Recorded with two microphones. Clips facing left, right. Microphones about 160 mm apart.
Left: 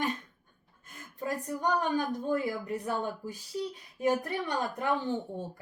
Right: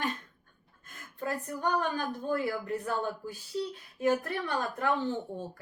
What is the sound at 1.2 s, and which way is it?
Speech, 15° left (ahead or behind).